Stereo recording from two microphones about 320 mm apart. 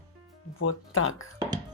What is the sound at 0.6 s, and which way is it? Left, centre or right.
Speech, left.